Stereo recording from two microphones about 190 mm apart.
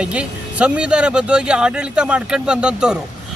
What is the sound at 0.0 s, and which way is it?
Speech, 5° right (ahead or behind).